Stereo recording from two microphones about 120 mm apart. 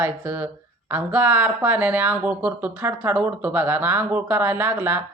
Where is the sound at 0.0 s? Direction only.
15° right (ahead or behind).